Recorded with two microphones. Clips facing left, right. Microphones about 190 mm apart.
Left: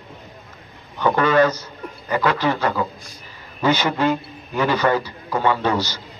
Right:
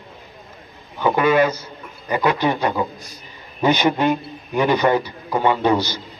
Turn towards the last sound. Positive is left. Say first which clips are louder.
# right 3 dB
turn(degrees=-15)  # may be behind; listen again after turning